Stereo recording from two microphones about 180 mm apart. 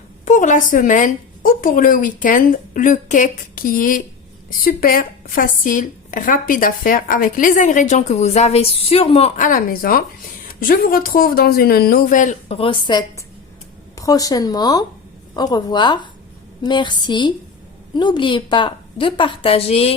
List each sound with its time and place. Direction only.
0.3 s speech: 45° left (ahead or behind)
9.5 s a woman's voice: 50° left (ahead or behind); by 19.9 s 35° left (ahead or behind)